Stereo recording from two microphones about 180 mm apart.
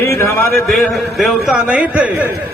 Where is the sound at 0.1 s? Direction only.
15° left (ahead or behind).